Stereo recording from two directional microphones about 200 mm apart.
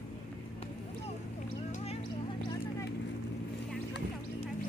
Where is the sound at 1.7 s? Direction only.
30° left (ahead or behind).